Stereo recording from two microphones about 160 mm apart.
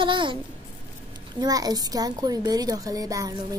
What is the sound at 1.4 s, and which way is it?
A woman's voice, 25° right (ahead or behind).